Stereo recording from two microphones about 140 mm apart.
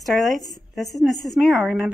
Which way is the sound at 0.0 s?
Centre (ahead or behind).